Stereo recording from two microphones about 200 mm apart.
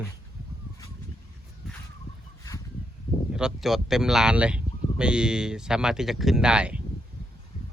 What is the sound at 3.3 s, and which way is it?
Speech, 5° right (ahead or behind).